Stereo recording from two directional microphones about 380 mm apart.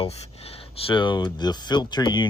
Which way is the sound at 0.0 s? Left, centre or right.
Centre.